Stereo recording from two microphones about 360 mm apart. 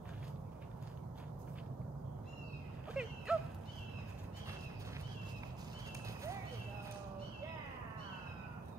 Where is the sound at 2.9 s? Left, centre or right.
Centre.